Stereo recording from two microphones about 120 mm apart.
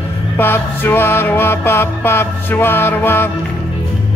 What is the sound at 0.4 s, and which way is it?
Music, 20° left (ahead or behind).